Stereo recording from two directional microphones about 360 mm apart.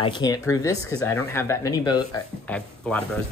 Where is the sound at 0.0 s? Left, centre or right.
Centre.